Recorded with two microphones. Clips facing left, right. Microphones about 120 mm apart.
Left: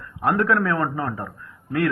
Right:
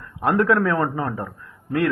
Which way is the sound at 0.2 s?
25° right (ahead or behind).